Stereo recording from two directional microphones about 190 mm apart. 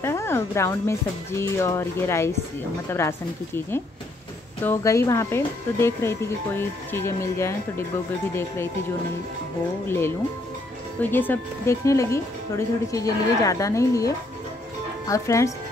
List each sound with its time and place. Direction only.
0.0 s speech: 15° left (ahead or behind)
9.8 s speech: 15° left (ahead or behind)